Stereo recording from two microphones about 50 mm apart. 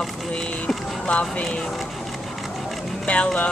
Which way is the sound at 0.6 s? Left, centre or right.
Left.